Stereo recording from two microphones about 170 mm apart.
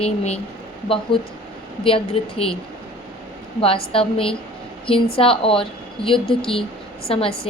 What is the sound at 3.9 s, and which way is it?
A woman's voice, 30° left (ahead or behind).